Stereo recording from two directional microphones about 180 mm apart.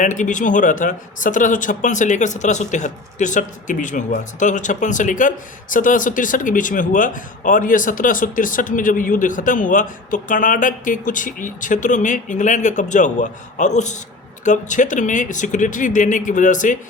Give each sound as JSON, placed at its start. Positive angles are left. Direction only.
{"t": 0.0, "sound": "speech", "side_deg": 45}